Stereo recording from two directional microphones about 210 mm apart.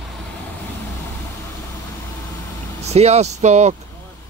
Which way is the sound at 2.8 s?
30° right (ahead or behind).